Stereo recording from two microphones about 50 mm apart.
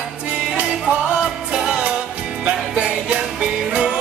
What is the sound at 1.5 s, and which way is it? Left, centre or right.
Music, centre.